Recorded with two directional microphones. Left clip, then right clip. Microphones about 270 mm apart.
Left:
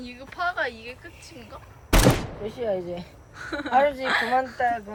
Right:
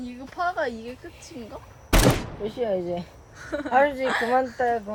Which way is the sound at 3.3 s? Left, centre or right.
Centre.